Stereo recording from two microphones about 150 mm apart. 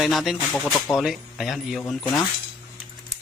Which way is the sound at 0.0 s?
Centre (ahead or behind).